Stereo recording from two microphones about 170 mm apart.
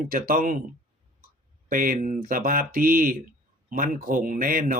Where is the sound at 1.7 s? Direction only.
55° right (ahead or behind).